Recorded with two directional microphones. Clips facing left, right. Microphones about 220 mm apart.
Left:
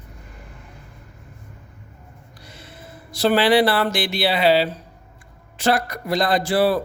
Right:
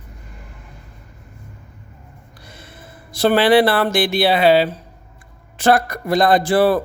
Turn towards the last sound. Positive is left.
turn(degrees=-50)  # may be behind; listen again after turning